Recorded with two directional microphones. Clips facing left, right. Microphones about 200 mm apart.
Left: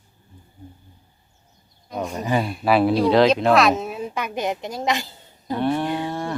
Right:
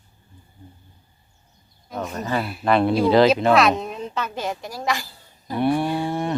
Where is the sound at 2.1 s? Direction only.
15° left (ahead or behind).